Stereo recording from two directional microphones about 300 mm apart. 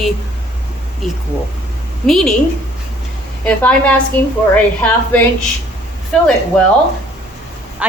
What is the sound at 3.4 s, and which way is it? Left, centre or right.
Speech, centre.